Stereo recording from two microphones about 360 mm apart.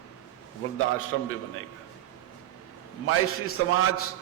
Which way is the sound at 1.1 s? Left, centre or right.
Left.